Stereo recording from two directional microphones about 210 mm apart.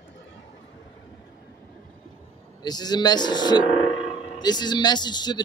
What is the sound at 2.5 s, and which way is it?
Speech, 20° left (ahead or behind).